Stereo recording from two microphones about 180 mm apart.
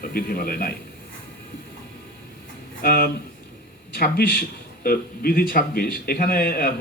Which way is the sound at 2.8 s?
55° left (ahead or behind).